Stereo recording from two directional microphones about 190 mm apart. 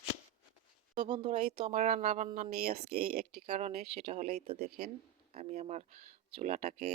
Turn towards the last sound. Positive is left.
turn(degrees=-50)  # may be behind; listen again after turning